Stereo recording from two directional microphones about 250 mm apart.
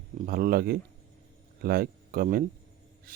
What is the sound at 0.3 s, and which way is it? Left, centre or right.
Speech, right.